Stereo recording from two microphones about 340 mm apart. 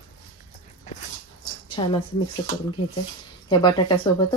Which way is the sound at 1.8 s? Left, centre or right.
Centre.